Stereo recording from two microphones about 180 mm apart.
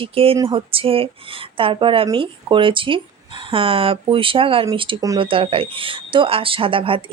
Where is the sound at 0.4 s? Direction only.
30° right (ahead or behind).